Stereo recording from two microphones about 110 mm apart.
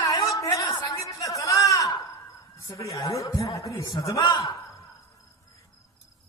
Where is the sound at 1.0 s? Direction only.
30° left (ahead or behind).